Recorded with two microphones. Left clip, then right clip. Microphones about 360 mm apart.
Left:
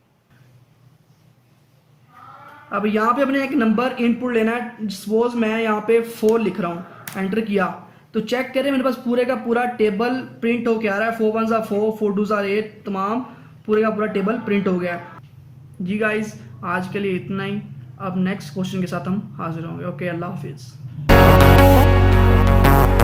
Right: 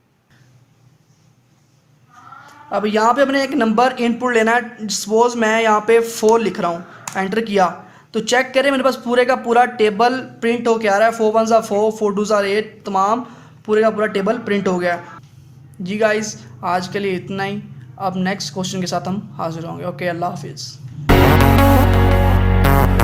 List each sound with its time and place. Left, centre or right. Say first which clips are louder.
2.6 s a man's voice: right 4 dB; centre
21.3 s music: left 1 dB; centre